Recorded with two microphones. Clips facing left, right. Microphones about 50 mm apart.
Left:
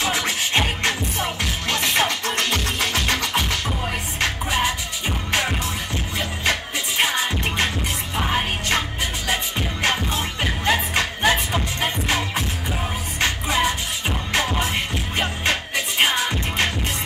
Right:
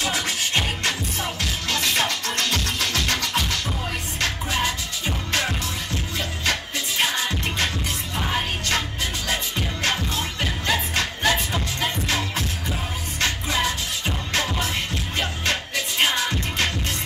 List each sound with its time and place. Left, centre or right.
0.0 s music: left